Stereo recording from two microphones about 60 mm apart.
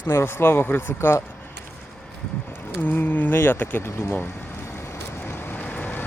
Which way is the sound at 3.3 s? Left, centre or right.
Left.